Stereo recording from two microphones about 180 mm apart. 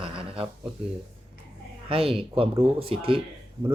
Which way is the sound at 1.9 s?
30° right (ahead or behind).